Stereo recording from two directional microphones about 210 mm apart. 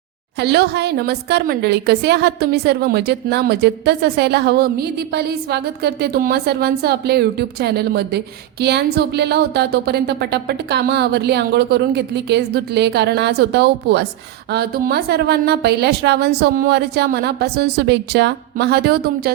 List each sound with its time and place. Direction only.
0.3 s a woman's voice: 55° right (ahead or behind)